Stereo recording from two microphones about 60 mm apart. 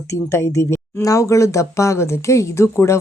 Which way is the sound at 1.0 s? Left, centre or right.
Left.